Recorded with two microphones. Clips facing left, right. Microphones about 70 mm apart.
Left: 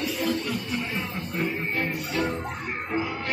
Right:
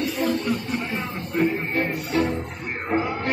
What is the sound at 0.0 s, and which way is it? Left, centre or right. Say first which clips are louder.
Music: right 3 dB; right.